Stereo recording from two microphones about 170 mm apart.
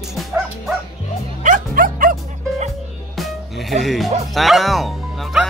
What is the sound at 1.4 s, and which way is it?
Music, 50° right (ahead or behind).